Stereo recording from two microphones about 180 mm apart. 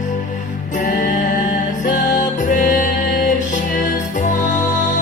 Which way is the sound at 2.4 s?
45° left (ahead or behind).